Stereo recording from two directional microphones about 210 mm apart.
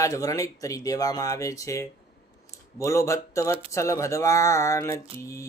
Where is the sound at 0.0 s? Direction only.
15° left (ahead or behind).